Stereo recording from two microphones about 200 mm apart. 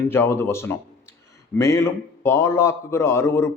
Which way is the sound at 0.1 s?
10° left (ahead or behind).